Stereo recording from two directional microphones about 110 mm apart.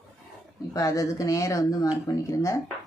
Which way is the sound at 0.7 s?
30° left (ahead or behind).